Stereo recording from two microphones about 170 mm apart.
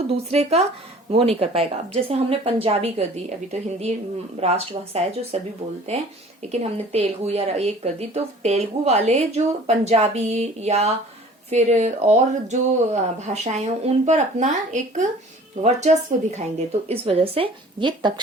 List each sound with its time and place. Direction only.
0.3 s speech: 40° right (ahead or behind)
6.5 s speech: 40° right (ahead or behind)